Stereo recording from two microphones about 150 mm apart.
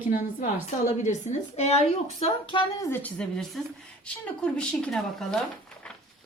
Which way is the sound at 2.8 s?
15° left (ahead or behind).